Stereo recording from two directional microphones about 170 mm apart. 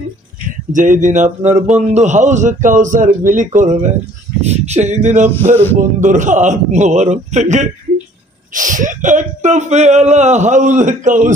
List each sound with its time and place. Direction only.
0.7 s speech: 50° right (ahead or behind)